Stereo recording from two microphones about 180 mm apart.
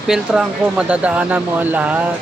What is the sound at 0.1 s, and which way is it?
Speech, 5° right (ahead or behind).